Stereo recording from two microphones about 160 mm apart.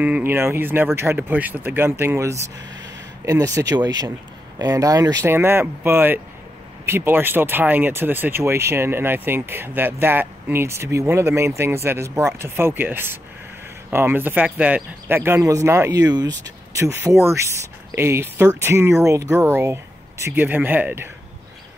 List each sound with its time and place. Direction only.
0.0 s speech: 10° right (ahead or behind)